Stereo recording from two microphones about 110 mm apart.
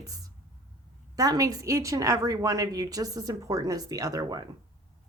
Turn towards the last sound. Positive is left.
turn(degrees=-35)  # may be behind; listen again after turning